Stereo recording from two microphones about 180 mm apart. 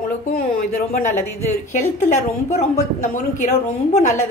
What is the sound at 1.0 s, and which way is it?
A woman's voice, 40° left (ahead or behind).